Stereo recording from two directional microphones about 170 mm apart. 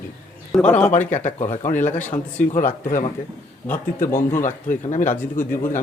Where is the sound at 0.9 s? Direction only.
45° left (ahead or behind).